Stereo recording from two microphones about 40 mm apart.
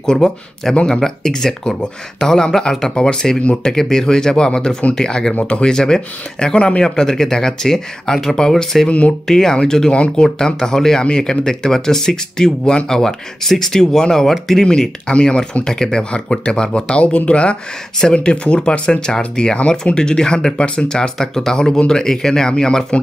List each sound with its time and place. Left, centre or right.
0.0 s speech: centre
9.9 s speech: left
10.2 s speech: centre